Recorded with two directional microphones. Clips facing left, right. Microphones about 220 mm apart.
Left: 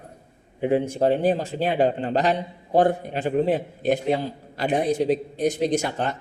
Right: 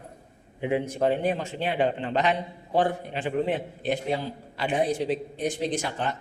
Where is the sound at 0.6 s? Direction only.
35° left (ahead or behind).